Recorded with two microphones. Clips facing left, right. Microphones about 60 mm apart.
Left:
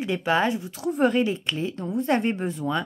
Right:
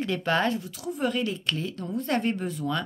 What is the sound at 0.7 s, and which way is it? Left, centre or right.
Speech, left.